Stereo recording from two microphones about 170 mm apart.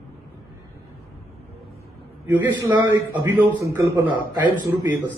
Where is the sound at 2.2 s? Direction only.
15° right (ahead or behind).